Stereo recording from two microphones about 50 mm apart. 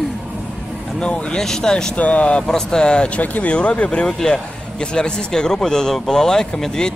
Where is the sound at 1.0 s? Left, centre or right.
Left.